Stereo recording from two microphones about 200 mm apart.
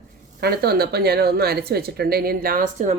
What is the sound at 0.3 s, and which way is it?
Speech, 50° right (ahead or behind).